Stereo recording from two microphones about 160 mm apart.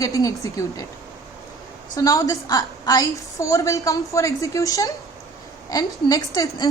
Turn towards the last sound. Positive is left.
turn(degrees=25)  # may be behind; listen again after turning